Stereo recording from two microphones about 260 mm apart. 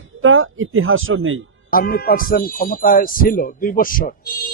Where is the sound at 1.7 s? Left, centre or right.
Left.